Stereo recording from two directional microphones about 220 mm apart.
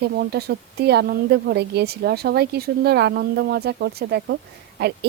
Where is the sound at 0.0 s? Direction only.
45° right (ahead or behind).